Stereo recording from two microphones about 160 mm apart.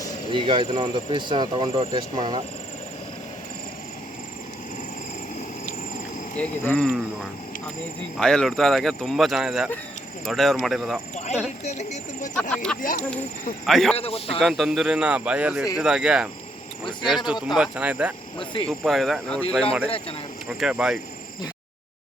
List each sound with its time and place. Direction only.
0.3 s speech: 30° right (ahead or behind)
6.4 s speech: 5° left (ahead or behind)
8.2 s speech: 5° left (ahead or behind)
11.6 s speech: 45° left (ahead or behind)
12.3 s speech: 5° left (ahead or behind)
12.8 s speech: 60° left (ahead or behind)
13.7 s speech: centre (ahead or behind)
13.9 s a man's voice: 35° left (ahead or behind)
14.3 s speech: centre (ahead or behind)
17.5 s speech: 5° right (ahead or behind)
18.3 s a man's voice: 35° left (ahead or behind)
18.7 s speech: centre (ahead or behind)
20.6 s speech: 5° right (ahead or behind)